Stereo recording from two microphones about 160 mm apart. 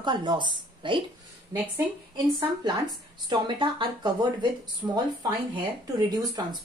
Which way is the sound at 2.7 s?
25° right (ahead or behind).